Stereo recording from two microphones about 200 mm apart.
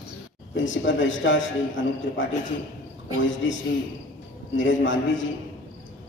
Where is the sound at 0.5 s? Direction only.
70° left (ahead or behind).